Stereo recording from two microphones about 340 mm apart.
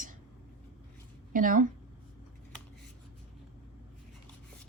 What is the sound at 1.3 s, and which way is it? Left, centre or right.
Speech, right.